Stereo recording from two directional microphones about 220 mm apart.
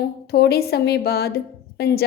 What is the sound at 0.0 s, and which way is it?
A woman's voice, 45° left (ahead or behind).